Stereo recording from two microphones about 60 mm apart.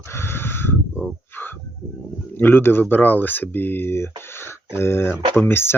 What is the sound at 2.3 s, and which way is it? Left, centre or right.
Speech, left.